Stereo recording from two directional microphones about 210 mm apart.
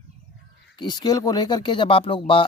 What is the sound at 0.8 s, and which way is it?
Speech, 20° left (ahead or behind).